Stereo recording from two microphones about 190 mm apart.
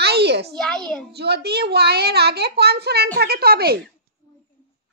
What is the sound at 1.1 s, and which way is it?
A woman's voice, 60° right (ahead or behind).